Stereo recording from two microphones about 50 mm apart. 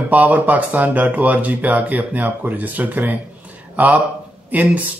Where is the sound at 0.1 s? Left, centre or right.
Right.